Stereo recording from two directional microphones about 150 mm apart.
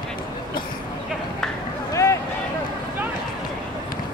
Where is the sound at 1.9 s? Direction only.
20° left (ahead or behind).